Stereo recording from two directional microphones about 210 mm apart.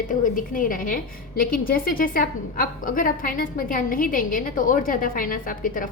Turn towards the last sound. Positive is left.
turn(degrees=40)  # may be behind; listen again after turning